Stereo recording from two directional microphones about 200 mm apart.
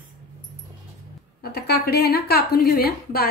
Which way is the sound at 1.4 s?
50° left (ahead or behind).